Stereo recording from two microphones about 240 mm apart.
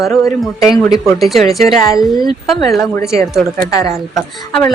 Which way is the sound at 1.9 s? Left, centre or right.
Centre.